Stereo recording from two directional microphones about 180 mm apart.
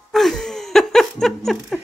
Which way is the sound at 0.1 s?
Centre (ahead or behind).